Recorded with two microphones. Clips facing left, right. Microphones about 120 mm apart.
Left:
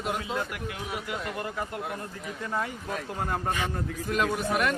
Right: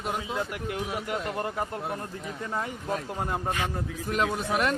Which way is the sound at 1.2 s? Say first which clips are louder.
Right 3 dB; 30° right (ahead or behind).